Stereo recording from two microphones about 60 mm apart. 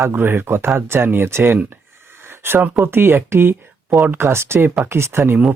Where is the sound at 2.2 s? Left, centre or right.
Right.